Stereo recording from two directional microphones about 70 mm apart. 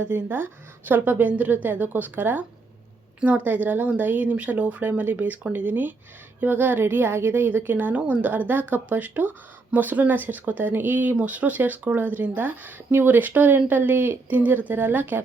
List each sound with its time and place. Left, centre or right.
0.0 s speech: right